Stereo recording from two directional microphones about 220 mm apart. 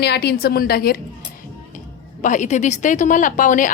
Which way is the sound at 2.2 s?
35° left (ahead or behind).